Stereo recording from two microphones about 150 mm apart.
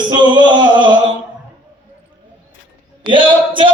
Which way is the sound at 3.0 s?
35° right (ahead or behind).